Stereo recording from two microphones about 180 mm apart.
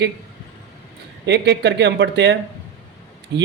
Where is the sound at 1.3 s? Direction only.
70° right (ahead or behind).